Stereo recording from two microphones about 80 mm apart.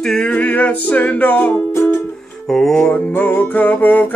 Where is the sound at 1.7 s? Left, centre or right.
Left.